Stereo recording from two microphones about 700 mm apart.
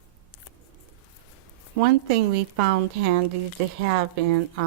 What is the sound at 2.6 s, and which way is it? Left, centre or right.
A woman's voice, right.